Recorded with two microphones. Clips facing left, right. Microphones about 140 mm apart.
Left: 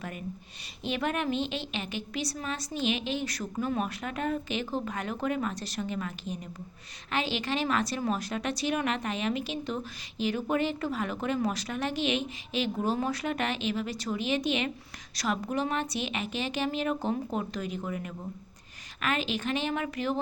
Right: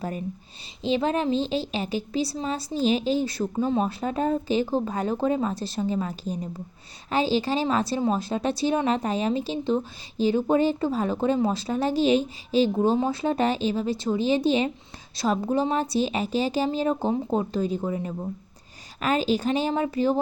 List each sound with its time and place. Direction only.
0.9 s a woman's voice: 30° right (ahead or behind)